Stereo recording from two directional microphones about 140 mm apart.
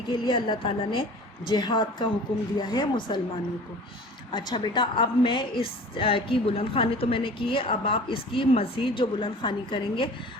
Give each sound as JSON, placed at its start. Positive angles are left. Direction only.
{"t": 0.1, "sound": "a woman's voice", "side_deg": 35}
{"t": 4.3, "sound": "a woman's voice", "side_deg": 35}